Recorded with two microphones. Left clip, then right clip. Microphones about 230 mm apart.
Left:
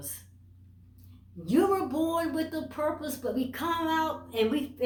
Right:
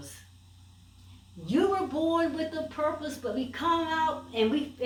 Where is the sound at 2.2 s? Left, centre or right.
Left.